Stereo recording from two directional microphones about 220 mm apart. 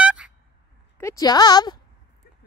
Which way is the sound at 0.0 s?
5° right (ahead or behind).